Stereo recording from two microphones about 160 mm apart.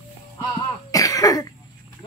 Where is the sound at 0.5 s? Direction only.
20° left (ahead or behind).